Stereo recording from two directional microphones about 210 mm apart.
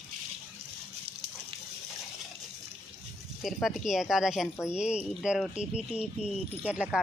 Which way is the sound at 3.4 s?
Centre (ahead or behind).